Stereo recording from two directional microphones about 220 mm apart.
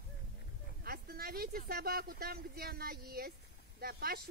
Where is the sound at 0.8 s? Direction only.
45° right (ahead or behind).